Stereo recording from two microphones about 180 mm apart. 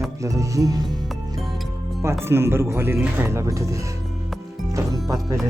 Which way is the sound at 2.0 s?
15° right (ahead or behind).